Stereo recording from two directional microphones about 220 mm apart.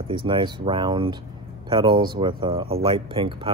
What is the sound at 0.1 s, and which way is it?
Speech, 20° right (ahead or behind).